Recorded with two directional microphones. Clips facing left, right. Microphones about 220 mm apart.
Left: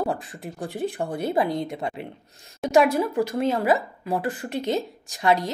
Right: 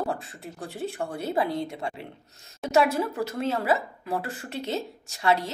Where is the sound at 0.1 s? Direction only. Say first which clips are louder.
Left 3 dB; 15° left (ahead or behind).